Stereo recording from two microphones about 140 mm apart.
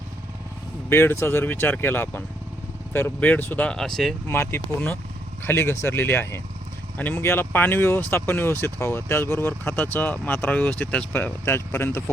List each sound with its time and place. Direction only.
0.9 s speech: 15° left (ahead or behind)
4.3 s speech: 20° left (ahead or behind)